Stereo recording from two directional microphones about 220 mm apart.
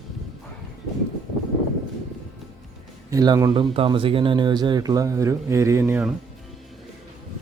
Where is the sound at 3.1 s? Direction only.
15° right (ahead or behind).